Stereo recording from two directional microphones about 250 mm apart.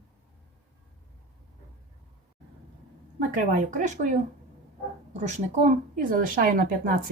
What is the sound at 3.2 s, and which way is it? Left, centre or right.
Speech, right.